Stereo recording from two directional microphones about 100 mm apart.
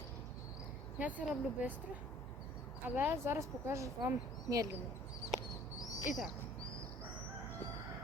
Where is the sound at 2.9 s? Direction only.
20° right (ahead or behind).